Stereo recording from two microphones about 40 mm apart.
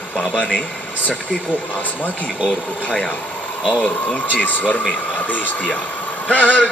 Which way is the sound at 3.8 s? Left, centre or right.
Left.